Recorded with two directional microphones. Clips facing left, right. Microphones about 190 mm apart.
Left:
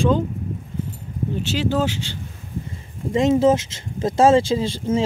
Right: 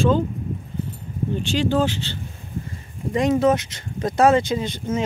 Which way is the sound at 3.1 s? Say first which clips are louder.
Left 2 dB; 25° left (ahead or behind).